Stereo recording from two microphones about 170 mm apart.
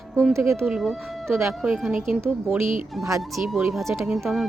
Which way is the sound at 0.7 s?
Centre (ahead or behind).